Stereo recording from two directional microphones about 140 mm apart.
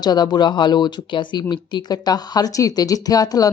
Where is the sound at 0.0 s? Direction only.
30° left (ahead or behind).